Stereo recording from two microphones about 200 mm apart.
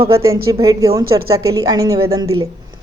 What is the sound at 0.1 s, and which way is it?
A woman's voice, 15° right (ahead or behind).